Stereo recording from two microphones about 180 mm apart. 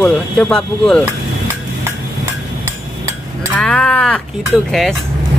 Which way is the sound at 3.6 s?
5° left (ahead or behind).